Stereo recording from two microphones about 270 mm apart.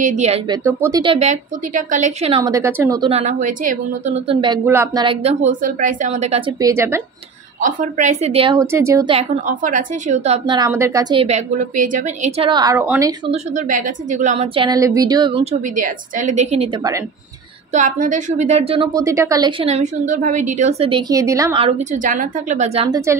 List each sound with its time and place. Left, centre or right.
0.0 s a woman's voice: right
0.7 s a woman's voice: centre
6.6 s speech: centre
7.6 s a woman's voice: right; by 13.1 s centre
13.3 s a woman's voice: right
15.7 s a woman's voice: right
17.7 s a woman's voice: right